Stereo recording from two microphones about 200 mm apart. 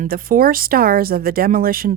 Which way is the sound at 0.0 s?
45° right (ahead or behind).